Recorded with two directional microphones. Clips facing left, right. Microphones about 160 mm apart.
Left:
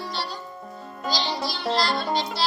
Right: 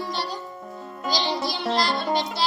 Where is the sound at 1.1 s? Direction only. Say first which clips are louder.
Right 2 dB; 20° right (ahead or behind).